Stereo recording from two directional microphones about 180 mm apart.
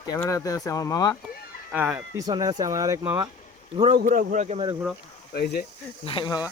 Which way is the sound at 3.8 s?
35° right (ahead or behind).